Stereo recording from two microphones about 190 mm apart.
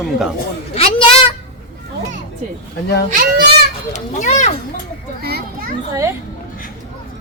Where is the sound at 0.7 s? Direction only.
30° left (ahead or behind).